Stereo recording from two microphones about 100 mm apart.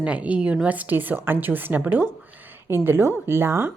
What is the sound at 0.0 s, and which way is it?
A woman's voice, 15° right (ahead or behind).